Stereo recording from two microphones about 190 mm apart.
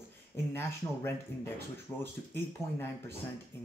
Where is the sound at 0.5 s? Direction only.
15° left (ahead or behind).